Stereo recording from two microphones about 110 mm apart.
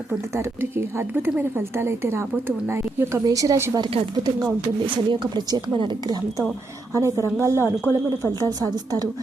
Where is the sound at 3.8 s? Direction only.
55° right (ahead or behind).